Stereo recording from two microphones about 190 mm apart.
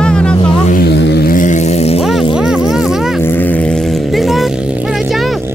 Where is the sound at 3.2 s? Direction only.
10° left (ahead or behind).